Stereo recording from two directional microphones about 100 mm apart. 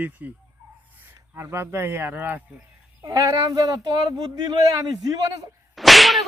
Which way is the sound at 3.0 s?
35° right (ahead or behind).